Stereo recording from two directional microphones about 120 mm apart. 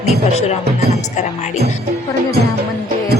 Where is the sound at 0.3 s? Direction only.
60° left (ahead or behind).